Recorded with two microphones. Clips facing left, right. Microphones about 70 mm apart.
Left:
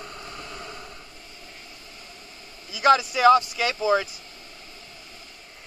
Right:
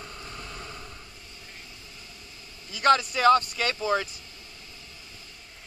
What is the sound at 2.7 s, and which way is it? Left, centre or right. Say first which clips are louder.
Vehicle: left 3 dB; centre.